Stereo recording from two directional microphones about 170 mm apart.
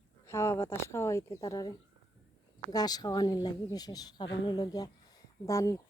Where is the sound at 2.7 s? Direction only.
25° left (ahead or behind).